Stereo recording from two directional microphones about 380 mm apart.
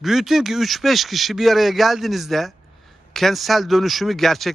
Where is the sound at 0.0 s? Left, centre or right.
Centre.